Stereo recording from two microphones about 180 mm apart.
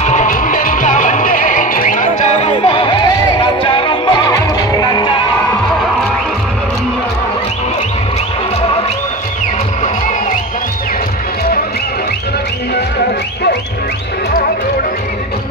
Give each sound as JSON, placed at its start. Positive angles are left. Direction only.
{"t": 0.0, "sound": "music", "side_deg": 45}